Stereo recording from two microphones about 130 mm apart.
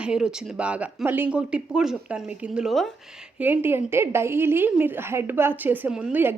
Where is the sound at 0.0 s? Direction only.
5° right (ahead or behind).